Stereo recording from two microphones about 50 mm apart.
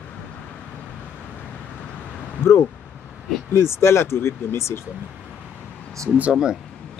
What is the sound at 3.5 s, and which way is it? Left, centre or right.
Speech, left.